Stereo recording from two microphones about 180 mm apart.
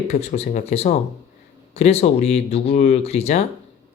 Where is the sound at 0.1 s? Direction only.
40° left (ahead or behind).